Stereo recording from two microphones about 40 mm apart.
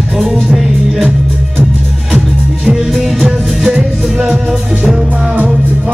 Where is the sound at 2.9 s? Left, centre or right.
Centre.